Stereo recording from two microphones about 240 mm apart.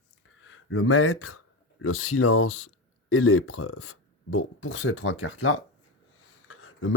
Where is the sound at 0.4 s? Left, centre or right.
Left.